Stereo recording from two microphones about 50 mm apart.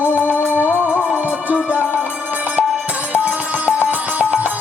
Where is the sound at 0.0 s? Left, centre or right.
Left.